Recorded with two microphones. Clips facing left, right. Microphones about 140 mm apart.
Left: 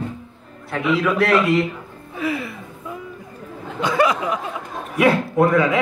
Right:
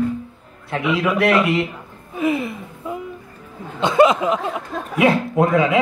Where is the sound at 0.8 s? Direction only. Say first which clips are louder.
Even; 10° right (ahead or behind).